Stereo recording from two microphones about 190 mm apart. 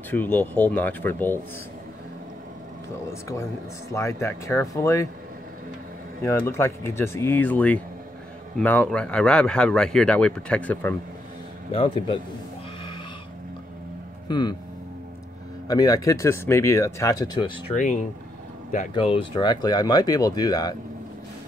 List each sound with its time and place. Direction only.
0.1 s speech: 10° left (ahead or behind)
3.1 s speech: 15° left (ahead or behind)
6.2 s speech: 15° left (ahead or behind)
11.7 s speech: 25° left (ahead or behind)
14.2 s speech: 25° left (ahead or behind)
15.7 s speech: 20° left (ahead or behind)
18.9 s speech: 30° left (ahead or behind)